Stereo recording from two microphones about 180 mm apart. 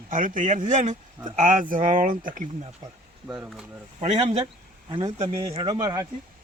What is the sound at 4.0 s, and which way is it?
Speech, 35° right (ahead or behind).